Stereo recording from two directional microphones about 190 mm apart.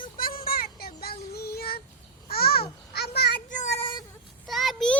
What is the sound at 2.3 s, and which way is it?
Babbling, 55° left (ahead or behind).